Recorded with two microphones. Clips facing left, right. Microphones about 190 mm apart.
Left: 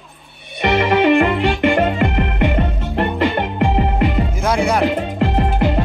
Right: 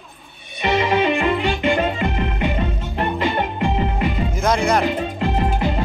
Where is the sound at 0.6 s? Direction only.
60° left (ahead or behind).